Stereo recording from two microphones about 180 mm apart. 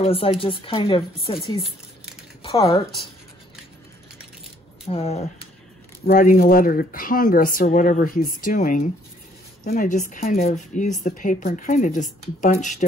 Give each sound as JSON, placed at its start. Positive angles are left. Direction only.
{"t": 0.0, "sound": "speech", "side_deg": 30}
{"t": 4.8, "sound": "speech", "side_deg": 35}
{"t": 6.0, "sound": "speech", "side_deg": 45}